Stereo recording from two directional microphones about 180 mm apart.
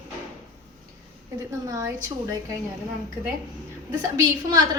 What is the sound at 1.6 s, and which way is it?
Speech, 20° right (ahead or behind).